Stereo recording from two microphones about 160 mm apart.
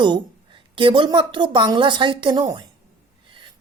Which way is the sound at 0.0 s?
30° right (ahead or behind).